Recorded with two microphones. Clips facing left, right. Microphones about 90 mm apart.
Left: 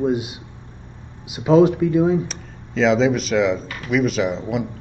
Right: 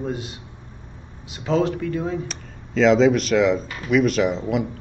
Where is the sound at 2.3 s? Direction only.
Centre (ahead or behind).